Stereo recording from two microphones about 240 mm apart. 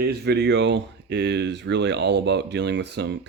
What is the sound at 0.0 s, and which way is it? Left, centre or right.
Speech, right.